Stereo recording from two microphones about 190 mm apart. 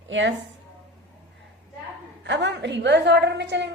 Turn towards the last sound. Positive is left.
turn(degrees=-65)  # may be behind; listen again after turning